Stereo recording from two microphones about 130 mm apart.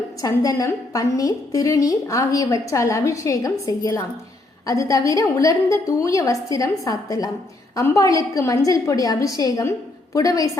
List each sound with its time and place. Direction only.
0.2 s a woman's voice: 25° left (ahead or behind)